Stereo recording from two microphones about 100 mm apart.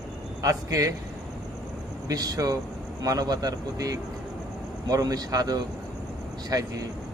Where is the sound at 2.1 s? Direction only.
40° right (ahead or behind).